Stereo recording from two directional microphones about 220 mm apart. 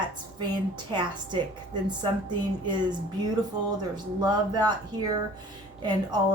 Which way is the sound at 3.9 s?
20° right (ahead or behind).